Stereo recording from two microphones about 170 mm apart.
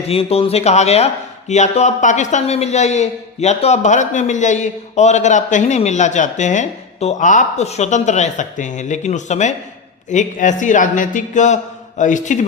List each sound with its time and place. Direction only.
0.1 s speech: 35° left (ahead or behind)